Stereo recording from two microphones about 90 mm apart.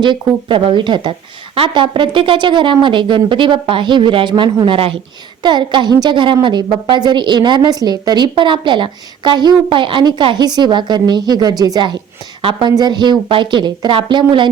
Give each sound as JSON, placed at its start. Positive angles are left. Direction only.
{"t": 0.0, "sound": "a woman's voice", "side_deg": -60}
{"t": 1.5, "sound": "a woman's voice", "side_deg": -70}
{"t": 4.6, "sound": "a woman's voice", "side_deg": -70}
{"t": 5.4, "sound": "a woman's voice", "side_deg": -55}
{"t": 12.4, "sound": "a woman's voice", "side_deg": -80}
{"t": 12.7, "sound": "a woman's voice", "side_deg": -55}